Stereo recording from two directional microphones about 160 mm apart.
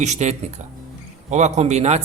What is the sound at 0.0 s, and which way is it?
A man's voice, 45° right (ahead or behind).